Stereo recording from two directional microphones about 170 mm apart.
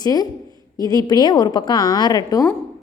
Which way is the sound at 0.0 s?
25° left (ahead or behind).